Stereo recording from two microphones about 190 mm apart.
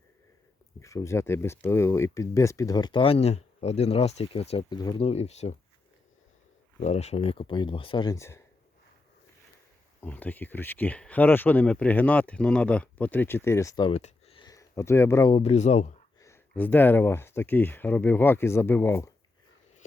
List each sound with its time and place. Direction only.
0.8 s speech: 15° left (ahead or behind)
4.9 s speech: 35° left (ahead or behind)
6.7 s speech: 35° left (ahead or behind); by 8.4 s 15° left (ahead or behind)
10.0 s speech: 10° left (ahead or behind)
13.9 s a sound: 35° left (ahead or behind); by 15.3 s 15° left (ahead or behind)
15.3 s speech: 35° left (ahead or behind)
16.2 s speech: 10° left (ahead or behind)